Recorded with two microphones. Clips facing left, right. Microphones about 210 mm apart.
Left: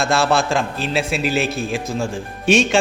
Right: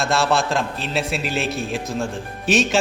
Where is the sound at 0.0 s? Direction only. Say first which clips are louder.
Left 2 dB; centre (ahead or behind).